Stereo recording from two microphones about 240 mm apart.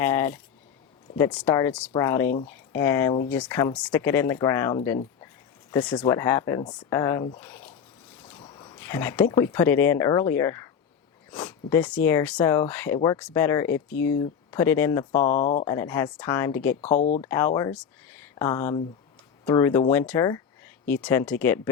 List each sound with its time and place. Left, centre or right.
0.0 s speech: centre
1.4 s speech: centre
15.1 s speech: left
15.6 s speech: centre